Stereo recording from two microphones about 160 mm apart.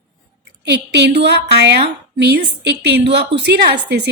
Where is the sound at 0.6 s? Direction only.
90° right.